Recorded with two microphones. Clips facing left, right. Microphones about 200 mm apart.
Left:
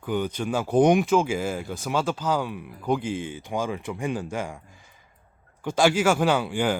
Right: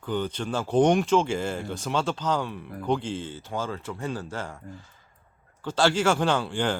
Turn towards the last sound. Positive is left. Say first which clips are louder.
# left 2 dB
turn(degrees=10)  # may be behind; listen again after turning